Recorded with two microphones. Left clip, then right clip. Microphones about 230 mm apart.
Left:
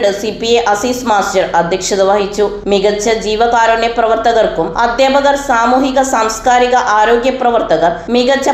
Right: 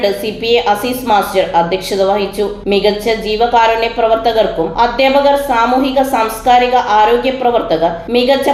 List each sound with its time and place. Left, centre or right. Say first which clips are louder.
0.0 s a woman's voice: left 1 dB; left